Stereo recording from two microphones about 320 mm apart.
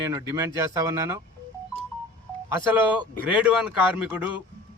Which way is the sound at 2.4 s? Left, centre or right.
Centre.